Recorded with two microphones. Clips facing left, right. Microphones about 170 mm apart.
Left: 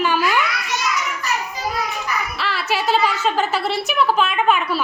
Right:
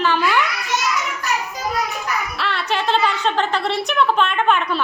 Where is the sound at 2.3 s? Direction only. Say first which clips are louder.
Even; centre (ahead or behind).